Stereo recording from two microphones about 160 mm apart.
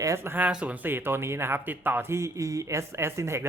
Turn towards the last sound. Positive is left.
turn(degrees=-15)  # may be behind; listen again after turning